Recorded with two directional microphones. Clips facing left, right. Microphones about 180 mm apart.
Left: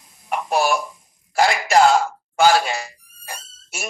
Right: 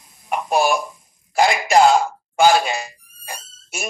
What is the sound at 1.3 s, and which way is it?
Speech, 15° right (ahead or behind).